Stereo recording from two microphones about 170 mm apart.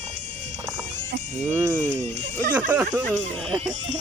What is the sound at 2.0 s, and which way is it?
Speech, 40° right (ahead or behind).